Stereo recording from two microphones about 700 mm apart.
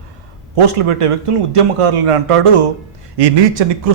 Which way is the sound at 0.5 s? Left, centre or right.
Right.